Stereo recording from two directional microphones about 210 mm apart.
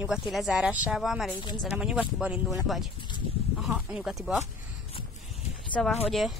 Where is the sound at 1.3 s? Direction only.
20° left (ahead or behind).